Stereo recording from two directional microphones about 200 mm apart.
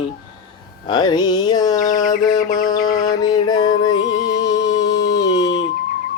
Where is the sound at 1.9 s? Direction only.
40° left (ahead or behind).